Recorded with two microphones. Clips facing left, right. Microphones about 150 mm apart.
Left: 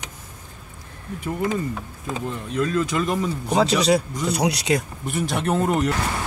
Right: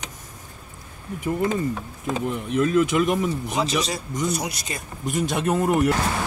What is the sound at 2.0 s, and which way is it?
Speech, 10° right (ahead or behind).